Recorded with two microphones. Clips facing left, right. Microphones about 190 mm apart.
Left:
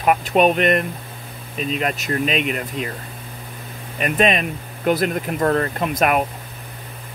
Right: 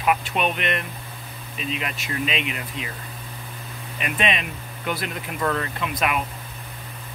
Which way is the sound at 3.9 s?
45° left (ahead or behind).